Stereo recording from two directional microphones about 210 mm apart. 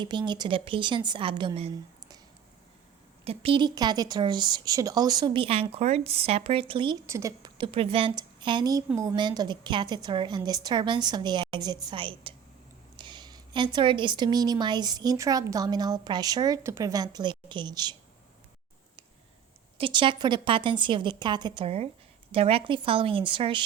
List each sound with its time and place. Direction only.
0.0 s a woman's voice: 20° right (ahead or behind)
3.2 s a woman's voice: 25° right (ahead or behind)
19.8 s a woman's voice: 25° right (ahead or behind)